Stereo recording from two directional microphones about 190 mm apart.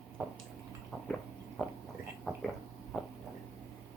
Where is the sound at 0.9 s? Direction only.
5° left (ahead or behind).